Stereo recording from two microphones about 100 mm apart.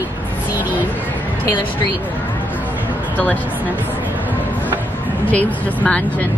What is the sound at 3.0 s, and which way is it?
Speech, 15° left (ahead or behind).